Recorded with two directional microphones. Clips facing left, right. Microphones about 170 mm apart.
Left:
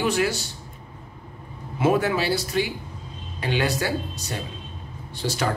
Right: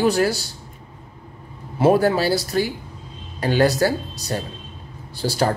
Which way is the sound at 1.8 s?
35° right (ahead or behind).